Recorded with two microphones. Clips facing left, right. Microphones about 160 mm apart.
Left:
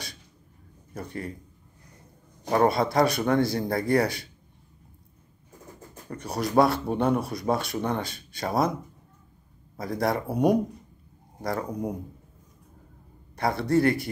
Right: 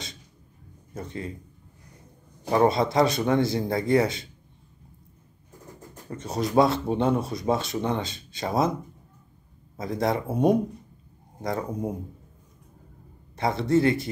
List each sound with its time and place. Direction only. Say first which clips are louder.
0.9 s speech: even; 25° right (ahead or behind)
2.5 s speech: right 1 dB; 20° right (ahead or behind)
6.0 s speech: right 1 dB; 25° right (ahead or behind)
9.8 s speech: right 1 dB; 20° right (ahead or behind)
13.4 s speech: right 1 dB; 20° right (ahead or behind)